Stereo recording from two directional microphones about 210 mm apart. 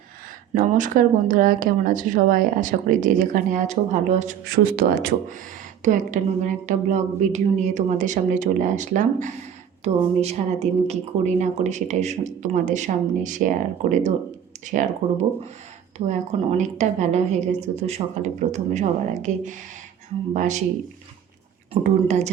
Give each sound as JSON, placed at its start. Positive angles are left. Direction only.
{"t": 0.9, "sound": "speech", "side_deg": -40}
{"t": 21.7, "sound": "speech", "side_deg": -30}